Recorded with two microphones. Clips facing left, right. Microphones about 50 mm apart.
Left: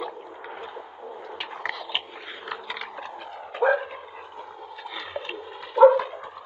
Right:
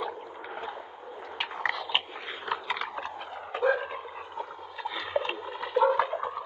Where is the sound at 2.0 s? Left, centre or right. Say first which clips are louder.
Right 1 dB; centre.